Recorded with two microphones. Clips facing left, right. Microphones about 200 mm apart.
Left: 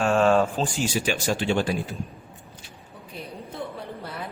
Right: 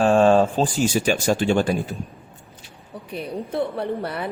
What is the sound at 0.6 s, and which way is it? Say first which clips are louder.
Speech: right 5 dB; 45° right (ahead or behind).